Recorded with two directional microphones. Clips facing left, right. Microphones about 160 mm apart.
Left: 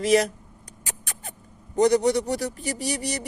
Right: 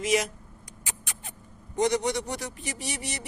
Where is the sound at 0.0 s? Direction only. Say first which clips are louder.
Left 6 dB; 35° left (ahead or behind).